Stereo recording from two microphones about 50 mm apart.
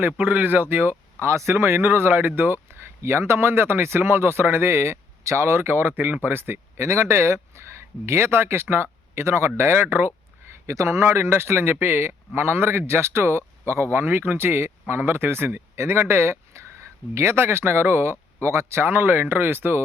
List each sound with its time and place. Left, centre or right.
0.2 s speech: right
1.2 s speech: right
5.2 s a man's voice: right
6.8 s speech: right
9.6 s a man's voice: right
10.5 s speech: right
11.0 s a man's voice: right